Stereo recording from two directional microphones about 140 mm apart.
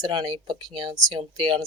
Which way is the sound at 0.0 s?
30° right (ahead or behind).